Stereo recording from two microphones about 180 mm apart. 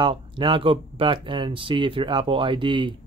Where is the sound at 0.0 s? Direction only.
25° right (ahead or behind).